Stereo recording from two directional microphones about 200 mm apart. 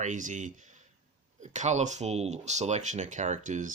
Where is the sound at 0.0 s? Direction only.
40° right (ahead or behind).